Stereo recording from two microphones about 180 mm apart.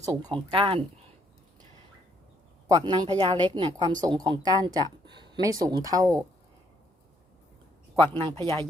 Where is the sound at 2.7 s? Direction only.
20° right (ahead or behind).